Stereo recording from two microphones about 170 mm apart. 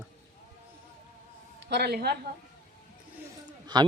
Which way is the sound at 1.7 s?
70° right (ahead or behind).